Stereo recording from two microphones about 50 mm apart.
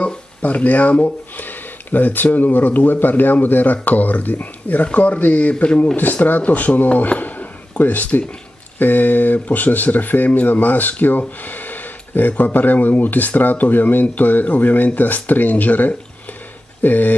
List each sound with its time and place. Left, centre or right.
0.0 s speech: left
5.9 s speech: left